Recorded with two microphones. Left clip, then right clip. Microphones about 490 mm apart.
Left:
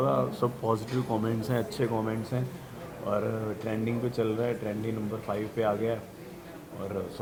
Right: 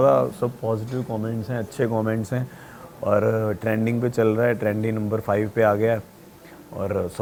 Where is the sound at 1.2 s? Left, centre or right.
Centre.